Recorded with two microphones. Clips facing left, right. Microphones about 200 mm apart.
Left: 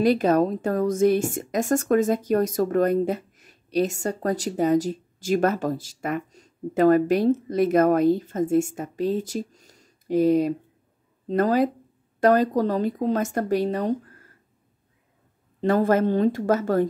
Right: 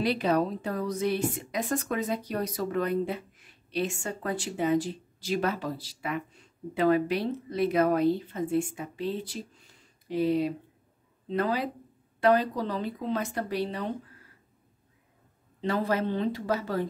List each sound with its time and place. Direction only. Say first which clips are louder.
0.0 s a woman's voice: left 7 dB; 45° left (ahead or behind)
15.6 s a woman's voice: left 8 dB; 50° left (ahead or behind)